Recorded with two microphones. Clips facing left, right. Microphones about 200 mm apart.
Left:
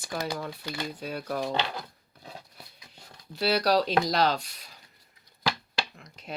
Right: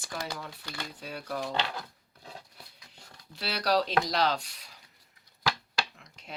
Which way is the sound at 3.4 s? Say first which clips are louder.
Left 4 dB; 35° left (ahead or behind).